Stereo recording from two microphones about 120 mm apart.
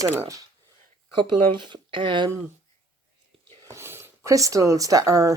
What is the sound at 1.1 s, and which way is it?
Speech, 40° right (ahead or behind).